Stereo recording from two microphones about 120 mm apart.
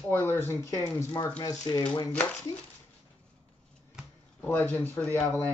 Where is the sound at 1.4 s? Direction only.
35° left (ahead or behind).